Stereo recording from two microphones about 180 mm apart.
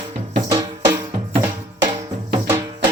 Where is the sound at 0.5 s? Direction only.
20° right (ahead or behind).